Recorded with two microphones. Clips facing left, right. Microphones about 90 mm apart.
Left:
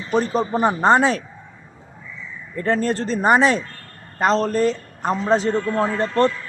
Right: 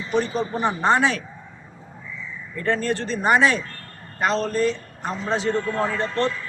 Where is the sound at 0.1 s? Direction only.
45° left (ahead or behind).